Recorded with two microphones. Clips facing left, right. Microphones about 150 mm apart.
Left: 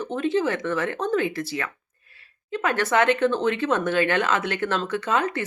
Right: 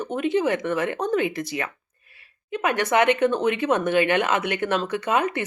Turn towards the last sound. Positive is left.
turn(degrees=-15)  # may be behind; listen again after turning